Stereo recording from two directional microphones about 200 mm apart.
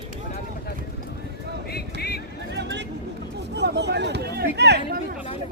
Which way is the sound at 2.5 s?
60° right (ahead or behind).